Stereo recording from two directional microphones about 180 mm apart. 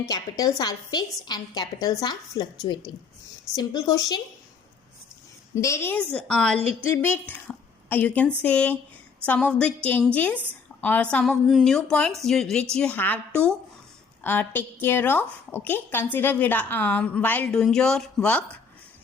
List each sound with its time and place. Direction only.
0.1 s a woman's voice: 20° left (ahead or behind)
3.5 s a woman's voice: 25° left (ahead or behind)
5.5 s a woman's voice: 15° left (ahead or behind)